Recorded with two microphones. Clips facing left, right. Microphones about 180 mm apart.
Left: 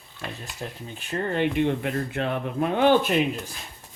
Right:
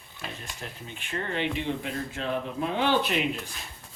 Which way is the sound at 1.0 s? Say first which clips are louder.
Left 6 dB; 45° left (ahead or behind).